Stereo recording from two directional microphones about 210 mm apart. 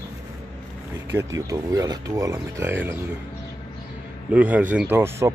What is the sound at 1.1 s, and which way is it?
Speech, 15° right (ahead or behind).